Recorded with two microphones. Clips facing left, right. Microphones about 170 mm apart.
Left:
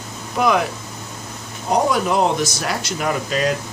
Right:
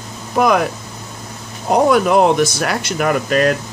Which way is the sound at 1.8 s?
60° right (ahead or behind).